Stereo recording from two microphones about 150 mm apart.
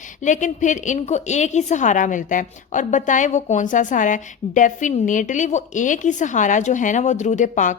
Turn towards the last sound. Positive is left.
turn(degrees=55)  # may be behind; listen again after turning